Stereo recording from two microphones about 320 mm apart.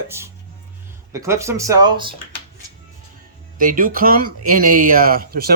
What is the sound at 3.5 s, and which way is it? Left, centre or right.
Speech, right.